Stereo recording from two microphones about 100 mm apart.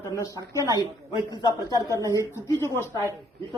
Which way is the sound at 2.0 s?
30° right (ahead or behind).